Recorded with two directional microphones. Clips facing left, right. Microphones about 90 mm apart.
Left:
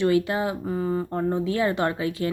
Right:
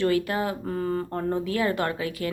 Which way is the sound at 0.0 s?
20° left (ahead or behind).